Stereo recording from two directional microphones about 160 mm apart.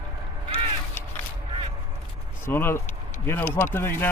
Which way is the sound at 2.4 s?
15° left (ahead or behind).